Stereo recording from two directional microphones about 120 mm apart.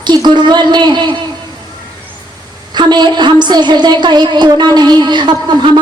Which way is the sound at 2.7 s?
35° right (ahead or behind).